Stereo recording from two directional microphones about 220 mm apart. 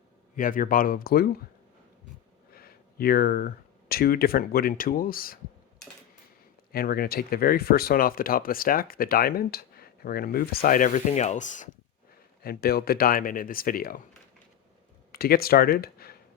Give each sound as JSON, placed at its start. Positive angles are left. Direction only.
{"t": 0.3, "sound": "speech", "side_deg": 40}
{"t": 2.6, "sound": "speech", "side_deg": 45}
{"t": 6.7, "sound": "speech", "side_deg": 45}
{"t": 15.1, "sound": "speech", "side_deg": 45}